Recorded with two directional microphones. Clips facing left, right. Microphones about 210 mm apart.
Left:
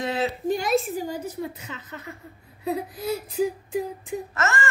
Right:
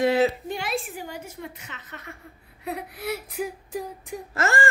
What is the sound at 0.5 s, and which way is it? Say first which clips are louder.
A woman's voice: left 7 dB; 40° left (ahead or behind).